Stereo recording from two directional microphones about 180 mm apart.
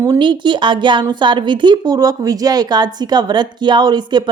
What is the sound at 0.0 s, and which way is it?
A woman's voice, 25° right (ahead or behind).